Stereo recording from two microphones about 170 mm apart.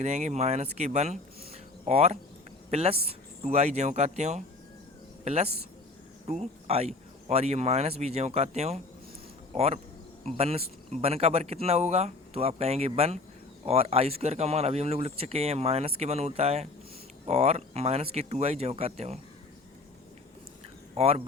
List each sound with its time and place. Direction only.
0.0 s speech: 45° right (ahead or behind)
20.9 s speech: 35° right (ahead or behind)